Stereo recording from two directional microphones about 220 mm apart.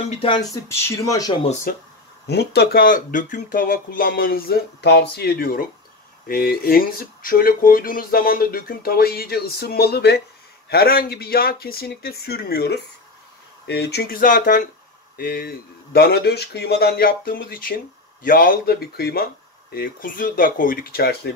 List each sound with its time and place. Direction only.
0.1 s speech: 25° left (ahead or behind)
2.2 s speech: 50° left (ahead or behind)